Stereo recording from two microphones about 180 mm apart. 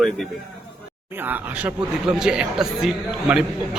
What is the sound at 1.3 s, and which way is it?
A man's voice, 5° right (ahead or behind).